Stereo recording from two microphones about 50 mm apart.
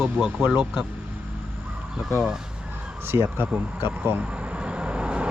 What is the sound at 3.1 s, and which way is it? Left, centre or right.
Speech, right.